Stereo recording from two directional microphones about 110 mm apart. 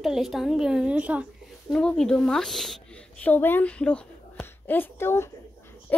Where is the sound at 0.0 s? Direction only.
Centre (ahead or behind).